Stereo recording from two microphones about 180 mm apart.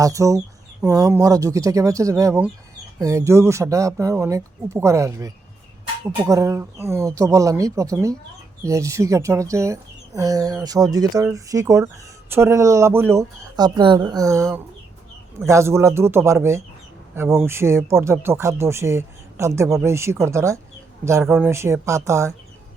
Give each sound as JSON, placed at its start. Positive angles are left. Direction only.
{"t": 0.0, "sound": "speech", "side_deg": -15}